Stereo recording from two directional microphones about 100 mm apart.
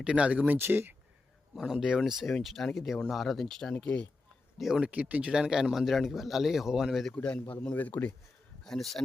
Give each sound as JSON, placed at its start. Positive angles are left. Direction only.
{"t": 0.0, "sound": "speech", "side_deg": -10}
{"t": 1.5, "sound": "speech", "side_deg": -5}
{"t": 4.5, "sound": "speech", "side_deg": -5}
{"t": 7.2, "sound": "a man's voice", "side_deg": 10}
{"t": 8.6, "sound": "speech", "side_deg": 5}